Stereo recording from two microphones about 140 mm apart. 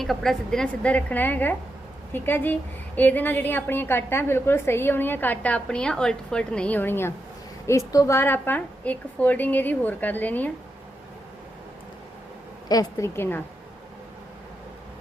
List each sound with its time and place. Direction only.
0.0 s a woman's voice: centre (ahead or behind)
12.6 s a woman's voice: 25° left (ahead or behind)
13.1 s a woman's voice: 15° left (ahead or behind)